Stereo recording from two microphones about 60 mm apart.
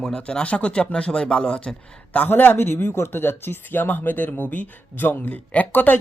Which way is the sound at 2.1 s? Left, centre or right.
Left.